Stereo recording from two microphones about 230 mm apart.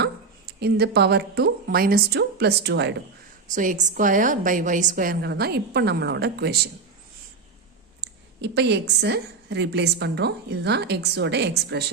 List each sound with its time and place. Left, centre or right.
0.0 s speech: right
3.5 s a woman's voice: right
8.0 s a woman's voice: right